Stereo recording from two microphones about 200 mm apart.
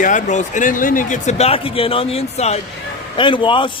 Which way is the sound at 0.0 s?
40° left (ahead or behind).